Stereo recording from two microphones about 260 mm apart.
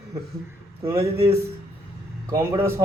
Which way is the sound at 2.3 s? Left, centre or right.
Centre.